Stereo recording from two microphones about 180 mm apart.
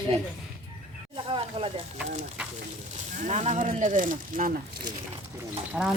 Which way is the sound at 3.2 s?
40° right (ahead or behind).